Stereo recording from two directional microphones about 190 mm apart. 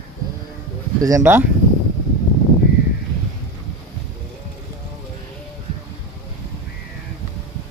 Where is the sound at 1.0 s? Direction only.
15° right (ahead or behind).